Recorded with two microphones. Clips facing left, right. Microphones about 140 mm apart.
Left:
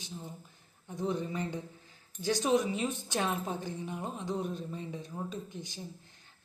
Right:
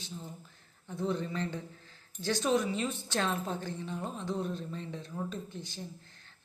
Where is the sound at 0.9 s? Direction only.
15° left (ahead or behind).